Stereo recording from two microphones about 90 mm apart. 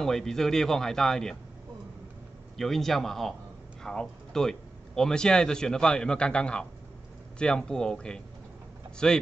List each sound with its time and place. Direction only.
0.0 s speech: 5° left (ahead or behind)
2.5 s speech: 5° left (ahead or behind)